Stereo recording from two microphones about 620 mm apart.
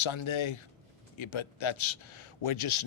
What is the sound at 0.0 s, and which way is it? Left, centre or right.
A man's voice, left.